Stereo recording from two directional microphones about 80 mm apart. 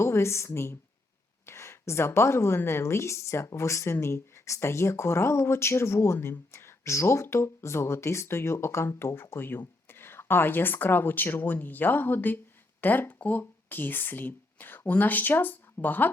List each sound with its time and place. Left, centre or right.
0.0 s a woman's voice: left